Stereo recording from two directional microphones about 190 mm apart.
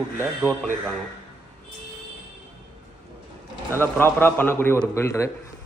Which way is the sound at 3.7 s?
10° left (ahead or behind).